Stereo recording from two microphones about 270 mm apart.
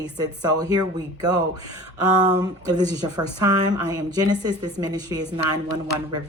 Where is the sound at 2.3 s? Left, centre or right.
Centre.